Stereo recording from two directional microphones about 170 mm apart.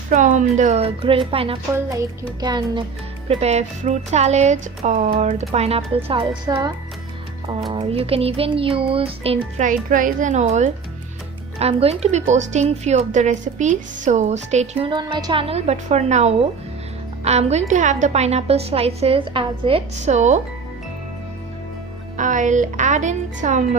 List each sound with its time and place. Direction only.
0.1 s a woman's voice: 45° right (ahead or behind); by 2.8 s 25° right (ahead or behind)
3.2 s speech: 40° right (ahead or behind)
9.6 s a woman's voice: 50° right (ahead or behind)
14.8 s speech: 25° right (ahead or behind); by 20.4 s 45° right (ahead or behind)
22.2 s a woman's voice: 50° right (ahead or behind)